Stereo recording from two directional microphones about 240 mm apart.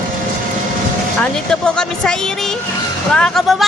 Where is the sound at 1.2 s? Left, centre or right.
Centre.